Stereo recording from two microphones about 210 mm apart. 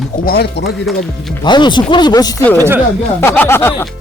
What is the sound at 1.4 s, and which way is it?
Speech, 20° left (ahead or behind).